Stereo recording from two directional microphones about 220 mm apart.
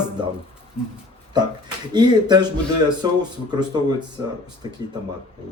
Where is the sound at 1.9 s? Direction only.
20° right (ahead or behind).